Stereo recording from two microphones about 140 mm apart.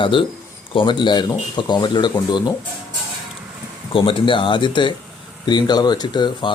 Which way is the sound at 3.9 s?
40° left (ahead or behind).